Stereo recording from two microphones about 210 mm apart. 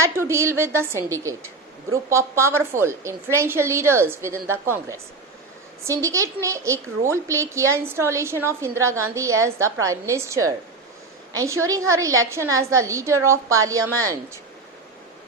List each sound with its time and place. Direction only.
0.0 s a woman's voice: 15° right (ahead or behind)